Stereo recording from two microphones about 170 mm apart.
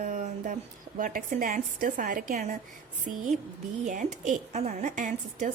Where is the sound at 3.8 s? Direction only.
45° right (ahead or behind).